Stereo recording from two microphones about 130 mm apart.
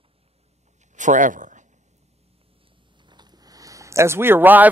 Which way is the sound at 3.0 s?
35° right (ahead or behind).